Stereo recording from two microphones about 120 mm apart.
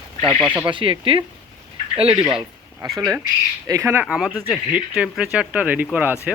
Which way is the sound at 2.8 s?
Centre (ahead or behind).